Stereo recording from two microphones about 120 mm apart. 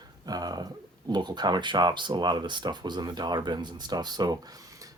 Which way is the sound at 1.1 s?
35° right (ahead or behind).